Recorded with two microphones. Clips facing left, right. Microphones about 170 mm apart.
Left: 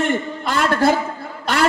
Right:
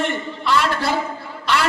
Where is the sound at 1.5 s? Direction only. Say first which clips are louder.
Even; 50° left (ahead or behind).